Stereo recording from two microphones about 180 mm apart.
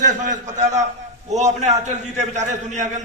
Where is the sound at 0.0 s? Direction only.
45° right (ahead or behind).